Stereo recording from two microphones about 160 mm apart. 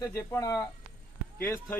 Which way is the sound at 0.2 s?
20° left (ahead or behind).